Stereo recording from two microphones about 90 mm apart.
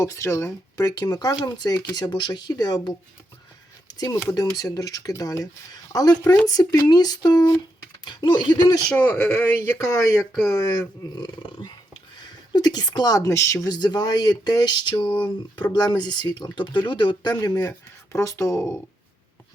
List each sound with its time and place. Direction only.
0.0 s speech: 35° left (ahead or behind)
3.9 s speech: 45° left (ahead or behind)
8.0 s speech: 60° left (ahead or behind)
8.9 s speech: 15° left (ahead or behind)
9.7 s a woman's voice: 40° left (ahead or behind)
13.7 s speech: 50° left (ahead or behind); by 18.8 s 30° left (ahead or behind)